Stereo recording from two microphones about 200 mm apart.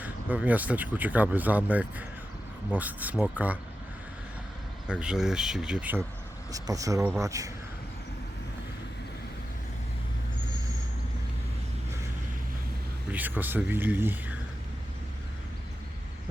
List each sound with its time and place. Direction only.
0.0 s speech: 10° right (ahead or behind)
4.9 s speech: 5° right (ahead or behind)
13.1 s speech: 10° right (ahead or behind)